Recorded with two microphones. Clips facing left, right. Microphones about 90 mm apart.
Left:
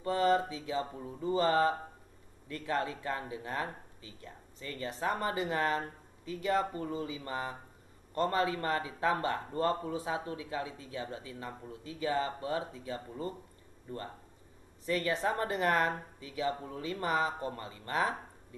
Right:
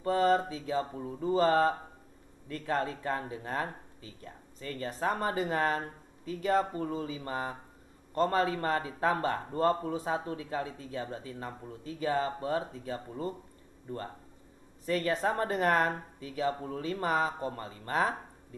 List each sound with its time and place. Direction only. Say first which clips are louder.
0.0 s speech: right 2 dB; 40° right (ahead or behind)
14.9 s speech: right 2 dB; 40° right (ahead or behind)